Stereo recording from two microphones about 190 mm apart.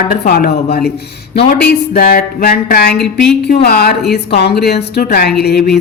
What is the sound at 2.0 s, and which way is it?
Speech, 55° left (ahead or behind).